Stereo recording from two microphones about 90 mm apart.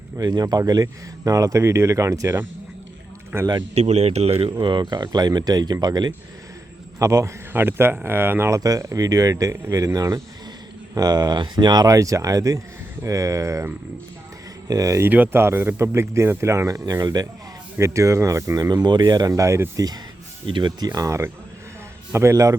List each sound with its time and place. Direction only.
0.2 s speech: 45° right (ahead or behind); by 3.5 s 30° right (ahead or behind)
4.6 s speech: 60° right (ahead or behind)
7.0 s speech: 35° right (ahead or behind)
7.5 s speech: 25° right (ahead or behind)
8.5 s speech: 40° right (ahead or behind)
14.7 s speech: 40° right (ahead or behind)
15.0 s speech: 20° right (ahead or behind); by 17.2 s 45° right (ahead or behind)
17.7 s speech: 35° right (ahead or behind)
19.7 s speech: 45° right (ahead or behind)